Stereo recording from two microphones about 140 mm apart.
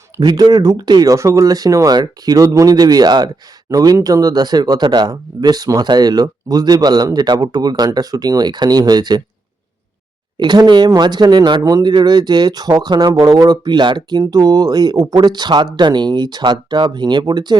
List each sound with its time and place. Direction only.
0.2 s speech: 25° right (ahead or behind)
10.3 s speech: 30° right (ahead or behind)